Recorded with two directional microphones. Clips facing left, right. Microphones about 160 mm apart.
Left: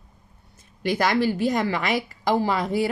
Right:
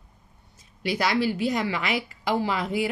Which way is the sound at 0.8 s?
50° left (ahead or behind).